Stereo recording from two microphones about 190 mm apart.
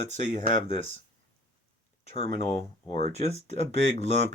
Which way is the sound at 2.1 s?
30° left (ahead or behind).